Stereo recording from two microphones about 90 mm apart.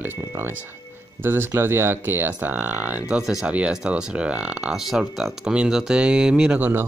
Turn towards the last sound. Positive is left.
turn(degrees=-10)  # may be behind; listen again after turning